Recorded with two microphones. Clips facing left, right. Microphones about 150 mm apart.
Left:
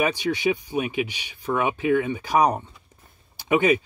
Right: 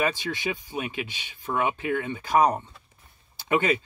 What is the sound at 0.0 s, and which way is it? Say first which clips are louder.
Speech: left 5 dB; 15° left (ahead or behind).